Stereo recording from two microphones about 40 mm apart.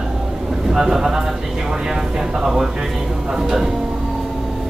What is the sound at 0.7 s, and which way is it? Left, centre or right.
Speech, centre.